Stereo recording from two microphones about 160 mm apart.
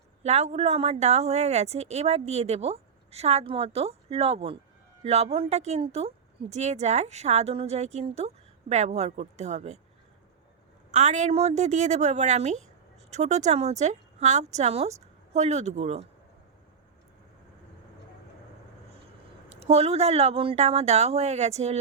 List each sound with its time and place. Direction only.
0.2 s a woman's voice: 45° right (ahead or behind)
10.9 s a woman's voice: 45° right (ahead or behind)
19.5 s a woman's voice: 40° right (ahead or behind)